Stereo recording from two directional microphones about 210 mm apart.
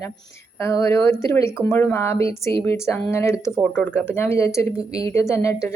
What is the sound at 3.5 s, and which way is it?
Speech, centre (ahead or behind).